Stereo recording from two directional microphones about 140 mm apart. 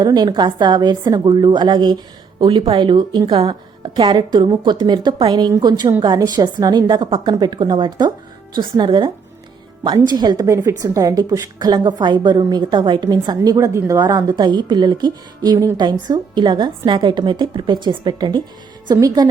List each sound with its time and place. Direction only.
0.0 s a woman's voice: 30° right (ahead or behind)